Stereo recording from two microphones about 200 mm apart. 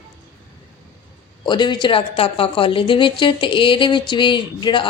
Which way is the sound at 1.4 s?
20° left (ahead or behind).